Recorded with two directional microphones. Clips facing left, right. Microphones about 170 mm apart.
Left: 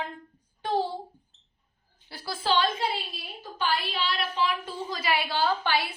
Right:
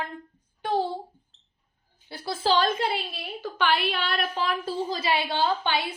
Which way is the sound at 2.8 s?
80° right.